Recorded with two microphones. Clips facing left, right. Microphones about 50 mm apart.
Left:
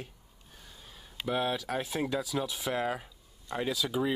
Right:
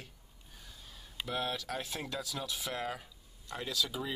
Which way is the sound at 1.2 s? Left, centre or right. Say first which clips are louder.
Left 5 dB; centre.